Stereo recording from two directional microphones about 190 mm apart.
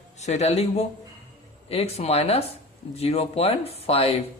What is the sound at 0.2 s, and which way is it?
Speech, 35° left (ahead or behind).